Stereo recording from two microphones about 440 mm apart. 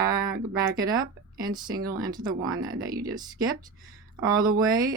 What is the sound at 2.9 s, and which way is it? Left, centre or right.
Speech, centre.